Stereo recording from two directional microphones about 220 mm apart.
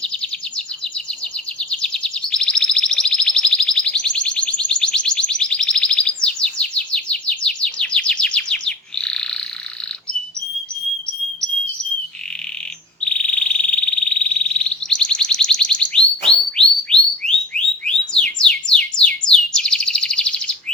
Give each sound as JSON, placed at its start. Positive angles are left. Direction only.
{"t": 0.0, "sound": "a sound", "side_deg": 5}
{"t": 13.1, "sound": "frog", "side_deg": 5}
{"t": 18.1, "sound": "bird", "side_deg": 5}